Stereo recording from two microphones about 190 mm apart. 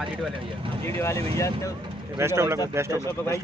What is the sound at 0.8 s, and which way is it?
Speech, 15° left (ahead or behind).